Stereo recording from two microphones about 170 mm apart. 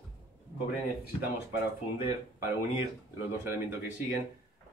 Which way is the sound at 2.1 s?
15° right (ahead or behind).